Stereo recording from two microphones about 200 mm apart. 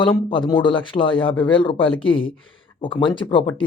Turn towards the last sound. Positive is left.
turn(degrees=25)  # may be behind; listen again after turning